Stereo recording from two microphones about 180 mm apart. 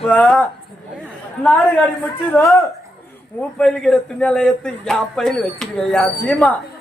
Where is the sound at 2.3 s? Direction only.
15° left (ahead or behind).